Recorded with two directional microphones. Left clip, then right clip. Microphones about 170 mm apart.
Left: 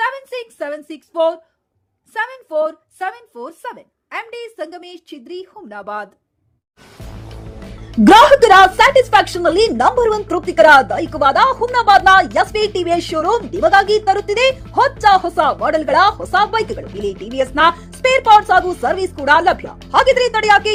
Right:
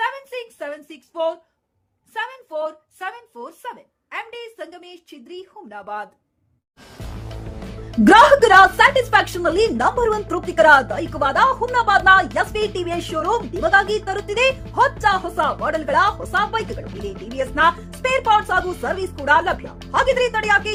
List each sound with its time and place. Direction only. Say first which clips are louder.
0.0 s a sound: left 4 dB; 30° left (ahead or behind)
2.1 s speech: left 7 dB; 30° left (ahead or behind)
7.3 s music: right 1 dB; centre (ahead or behind)
8.0 s a woman's voice: left 4 dB; 15° left (ahead or behind)
14.5 s speech: left 3 dB; centre (ahead or behind)
15.0 s speech: left 7 dB; 20° left (ahead or behind)
16.6 s speech: left 7 dB; centre (ahead or behind)
17.3 s speech: left 4 dB; 25° left (ahead or behind)
18.6 s speech: left 6 dB; centre (ahead or behind)
18.9 s speech: left 5 dB; 25° left (ahead or behind)